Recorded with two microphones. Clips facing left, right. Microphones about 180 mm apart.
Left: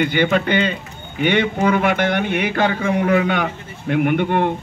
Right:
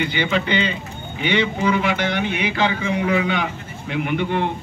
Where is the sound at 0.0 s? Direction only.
50° left (ahead or behind).